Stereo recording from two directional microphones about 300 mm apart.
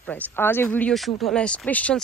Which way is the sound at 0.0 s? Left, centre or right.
Centre.